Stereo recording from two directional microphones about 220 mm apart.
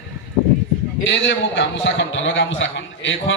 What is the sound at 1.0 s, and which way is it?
A man's voice, 55° left (ahead or behind).